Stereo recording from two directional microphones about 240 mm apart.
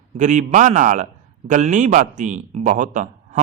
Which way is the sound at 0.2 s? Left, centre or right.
Right.